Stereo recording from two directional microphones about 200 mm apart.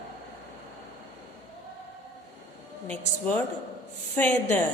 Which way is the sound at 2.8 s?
5° left (ahead or behind).